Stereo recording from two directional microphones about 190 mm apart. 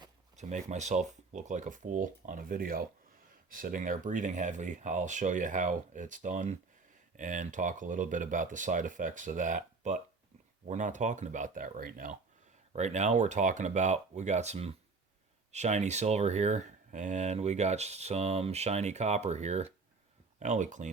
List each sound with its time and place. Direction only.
0.3 s speech: 35° right (ahead or behind)